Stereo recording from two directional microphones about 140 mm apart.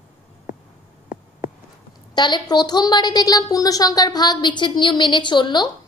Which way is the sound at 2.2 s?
30° left (ahead or behind).